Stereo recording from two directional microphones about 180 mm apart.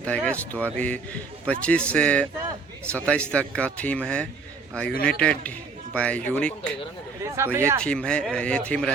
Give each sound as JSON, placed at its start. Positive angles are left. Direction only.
{"t": 0.1, "sound": "a man's voice", "side_deg": 5}
{"t": 7.3, "sound": "speech", "side_deg": -15}
{"t": 7.8, "sound": "speech", "side_deg": 5}